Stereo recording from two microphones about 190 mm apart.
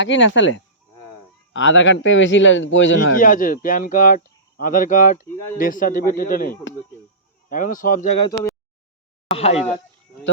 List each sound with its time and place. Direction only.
0.0 s a man's voice: 75° left (ahead or behind)
3.2 s speech: 45° left (ahead or behind)
7.5 s speech: 45° left (ahead or behind)
9.3 s speech: 35° left (ahead or behind)